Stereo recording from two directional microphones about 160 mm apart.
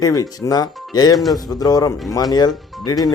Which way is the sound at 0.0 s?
20° left (ahead or behind).